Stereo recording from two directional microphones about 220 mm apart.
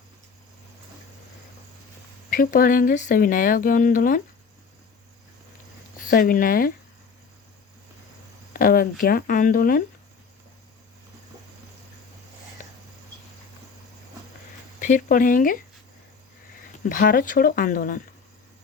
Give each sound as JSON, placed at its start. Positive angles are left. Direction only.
{"t": 2.3, "sound": "speech", "side_deg": 40}
{"t": 6.1, "sound": "speech", "side_deg": 40}
{"t": 8.5, "sound": "speech", "side_deg": 40}
{"t": 14.8, "sound": "speech", "side_deg": 35}
{"t": 16.9, "sound": "speech", "side_deg": 40}